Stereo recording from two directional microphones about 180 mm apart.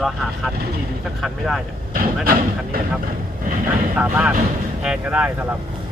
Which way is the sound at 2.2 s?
50° right (ahead or behind).